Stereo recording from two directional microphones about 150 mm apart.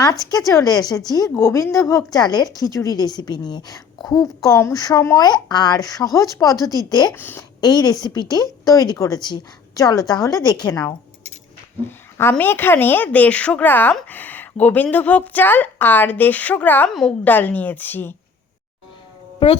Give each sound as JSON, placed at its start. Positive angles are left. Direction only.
{"t": 0.0, "sound": "a woman's voice", "side_deg": 25}
{"t": 7.2, "sound": "a woman's voice", "side_deg": 10}
{"t": 7.6, "sound": "a woman's voice", "side_deg": 25}
{"t": 11.9, "sound": "a woman's voice", "side_deg": 15}